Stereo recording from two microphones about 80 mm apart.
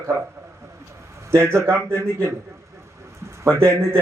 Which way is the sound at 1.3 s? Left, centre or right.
Right.